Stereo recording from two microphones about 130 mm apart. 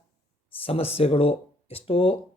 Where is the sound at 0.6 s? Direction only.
50° left (ahead or behind).